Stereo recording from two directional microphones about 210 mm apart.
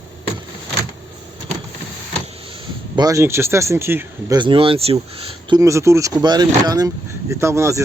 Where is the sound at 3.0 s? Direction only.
15° right (ahead or behind).